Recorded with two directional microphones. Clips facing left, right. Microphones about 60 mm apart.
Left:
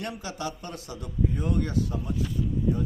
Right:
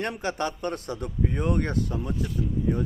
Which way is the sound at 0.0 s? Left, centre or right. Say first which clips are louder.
Right 5 dB; right.